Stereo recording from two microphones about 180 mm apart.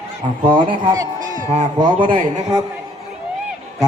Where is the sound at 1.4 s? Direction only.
40° right (ahead or behind).